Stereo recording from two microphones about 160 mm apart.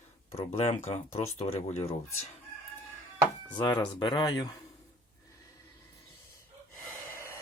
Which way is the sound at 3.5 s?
30° left (ahead or behind).